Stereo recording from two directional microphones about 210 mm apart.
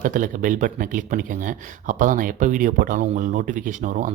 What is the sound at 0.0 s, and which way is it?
Speech, 40° right (ahead or behind).